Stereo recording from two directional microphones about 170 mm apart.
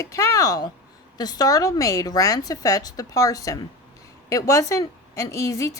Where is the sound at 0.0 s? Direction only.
15° left (ahead or behind).